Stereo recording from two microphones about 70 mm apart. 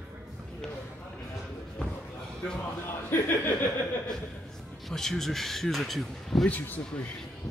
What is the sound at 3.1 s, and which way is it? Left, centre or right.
Speech, left.